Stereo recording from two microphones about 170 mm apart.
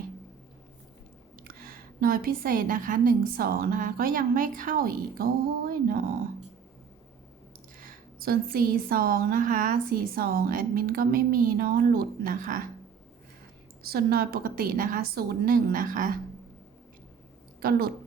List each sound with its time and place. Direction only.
2.0 s a woman's voice: 60° right (ahead or behind)
7.9 s a woman's voice: 60° right (ahead or behind)
13.8 s a woman's voice: 65° right (ahead or behind)
17.6 s a woman's voice: 65° right (ahead or behind)